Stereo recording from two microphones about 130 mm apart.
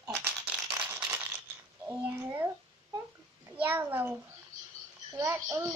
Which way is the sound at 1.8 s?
15° right (ahead or behind).